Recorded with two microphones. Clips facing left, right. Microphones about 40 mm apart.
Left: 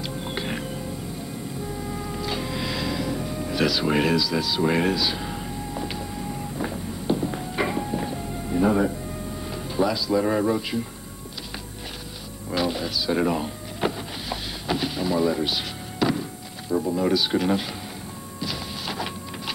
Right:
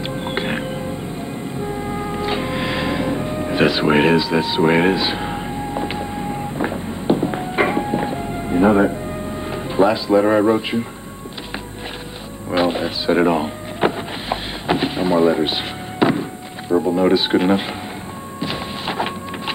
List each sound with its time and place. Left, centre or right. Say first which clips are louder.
0.0 s music: right 7 dB; right
9.5 s speech: right 8 dB; right
12.4 s a sound: right 7 dB; right